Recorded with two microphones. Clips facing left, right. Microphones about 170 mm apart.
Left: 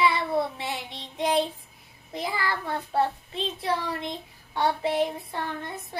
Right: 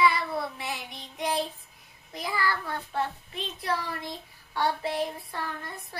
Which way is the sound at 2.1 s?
25° left (ahead or behind).